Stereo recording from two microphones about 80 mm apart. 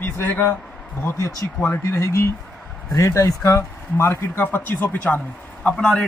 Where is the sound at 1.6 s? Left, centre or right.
Left.